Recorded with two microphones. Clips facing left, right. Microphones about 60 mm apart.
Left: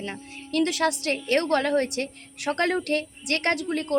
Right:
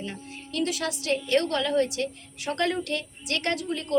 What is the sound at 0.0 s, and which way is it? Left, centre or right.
A woman's voice, left.